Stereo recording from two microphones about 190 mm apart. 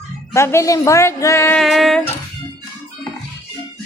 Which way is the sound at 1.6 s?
Centre (ahead or behind).